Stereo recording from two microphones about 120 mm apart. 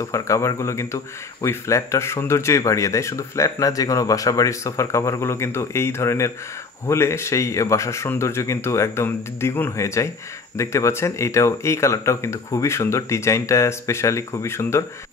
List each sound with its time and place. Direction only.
0.0 s speech: 25° left (ahead or behind)